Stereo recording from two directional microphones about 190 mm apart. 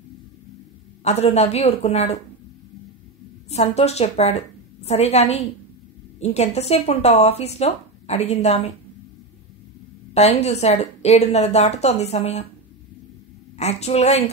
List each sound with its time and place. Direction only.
1.0 s speech: 35° left (ahead or behind)
3.4 s speech: 35° left (ahead or behind)
10.1 s speech: 35° left (ahead or behind)
13.6 s speech: 35° left (ahead or behind)